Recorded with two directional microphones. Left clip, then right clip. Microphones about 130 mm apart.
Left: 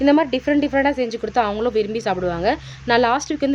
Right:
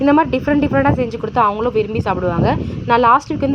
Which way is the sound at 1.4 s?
Centre (ahead or behind).